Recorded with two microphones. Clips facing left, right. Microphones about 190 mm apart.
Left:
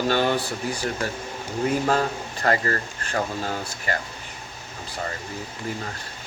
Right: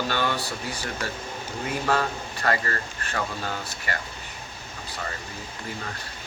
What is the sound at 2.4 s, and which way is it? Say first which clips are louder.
Speech: left 3 dB; 35° left (ahead or behind).